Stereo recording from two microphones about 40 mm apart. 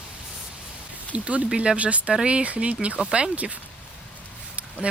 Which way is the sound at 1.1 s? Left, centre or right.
Right.